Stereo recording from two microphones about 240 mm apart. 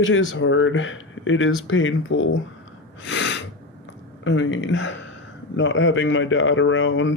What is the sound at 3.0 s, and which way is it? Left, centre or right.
Sneeze, left.